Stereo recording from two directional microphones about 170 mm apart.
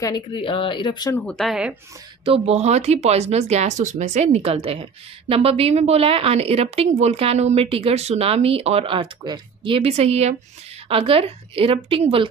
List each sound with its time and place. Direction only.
0.0 s speech: 25° left (ahead or behind)
1.1 s speech: 5° left (ahead or behind)
2.2 s a woman's voice: 35° right (ahead or behind)